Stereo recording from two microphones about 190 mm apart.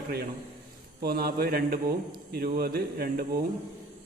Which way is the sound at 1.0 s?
55° right (ahead or behind).